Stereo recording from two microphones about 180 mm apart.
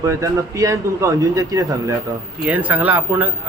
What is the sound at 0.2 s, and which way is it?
Speech, 15° right (ahead or behind).